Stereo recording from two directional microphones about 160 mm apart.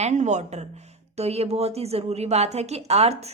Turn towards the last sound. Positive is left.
turn(degrees=-40)  # may be behind; listen again after turning